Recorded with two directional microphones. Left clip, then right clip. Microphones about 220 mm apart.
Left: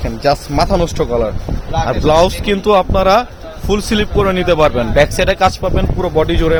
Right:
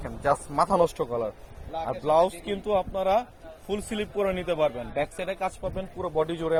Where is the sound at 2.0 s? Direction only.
20° left (ahead or behind).